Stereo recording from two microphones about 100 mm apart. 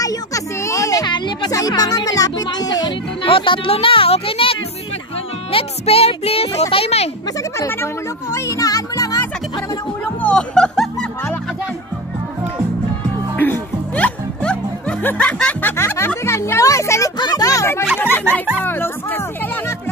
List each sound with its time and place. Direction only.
0.0 s music: 35° left (ahead or behind)
1.0 s a sound: 50° left (ahead or behind)
1.5 s speech: 40° left (ahead or behind)
3.3 s speech: 60° left (ahead or behind); by 7.1 s 85° left
7.5 s speech: 30° left (ahead or behind)
10.0 s music: 10° left (ahead or behind)
13.4 s music: 15° left (ahead or behind)
15.7 s a woman's voice: 25° left (ahead or behind)
18.6 s music: 20° left (ahead or behind)